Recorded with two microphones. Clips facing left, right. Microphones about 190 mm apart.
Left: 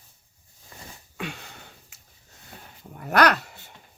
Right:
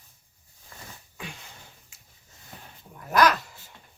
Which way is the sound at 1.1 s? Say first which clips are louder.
Left 7 dB; 70° left (ahead or behind).